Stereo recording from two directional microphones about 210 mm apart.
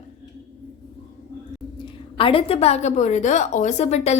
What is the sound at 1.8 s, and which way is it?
A woman's voice, 25° left (ahead or behind).